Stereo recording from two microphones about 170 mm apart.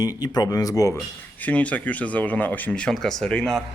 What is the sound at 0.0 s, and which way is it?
Speech, 25° left (ahead or behind).